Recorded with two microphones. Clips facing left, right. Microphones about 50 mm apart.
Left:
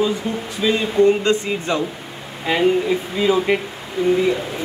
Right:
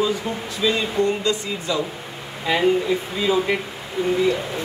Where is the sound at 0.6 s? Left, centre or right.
Left.